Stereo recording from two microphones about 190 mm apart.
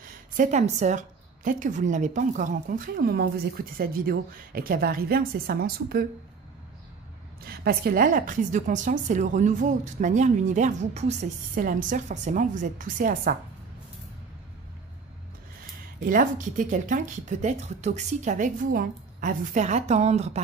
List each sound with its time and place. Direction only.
0.4 s a woman's voice: 40° right (ahead or behind); by 6.0 s 55° right (ahead or behind)
7.4 s a woman's voice: 55° right (ahead or behind)
16.0 s a woman's voice: 45° right (ahead or behind)